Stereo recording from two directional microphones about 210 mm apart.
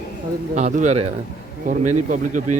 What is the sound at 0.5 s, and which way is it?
Speech, 35° right (ahead or behind).